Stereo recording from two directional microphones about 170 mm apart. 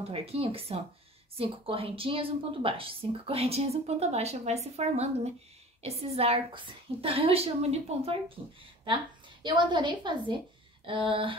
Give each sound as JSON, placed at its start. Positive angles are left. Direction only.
{"t": 0.1, "sound": "a woman's voice", "side_deg": -35}
{"t": 9.4, "sound": "a woman's voice", "side_deg": -25}